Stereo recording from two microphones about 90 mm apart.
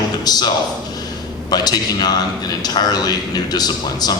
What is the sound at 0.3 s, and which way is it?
A man's voice, 50° left (ahead or behind).